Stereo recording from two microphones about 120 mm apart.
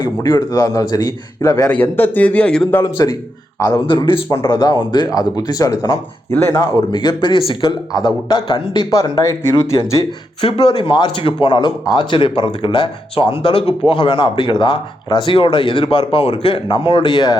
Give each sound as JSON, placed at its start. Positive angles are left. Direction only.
{"t": 0.0, "sound": "a man's voice", "side_deg": 35}
{"t": 1.6, "sound": "a man's voice", "side_deg": 15}
{"t": 2.8, "sound": "a man's voice", "side_deg": 30}
{"t": 3.6, "sound": "a man's voice", "side_deg": 40}
{"t": 6.9, "sound": "speech", "side_deg": 40}
{"t": 10.4, "sound": "speech", "side_deg": 45}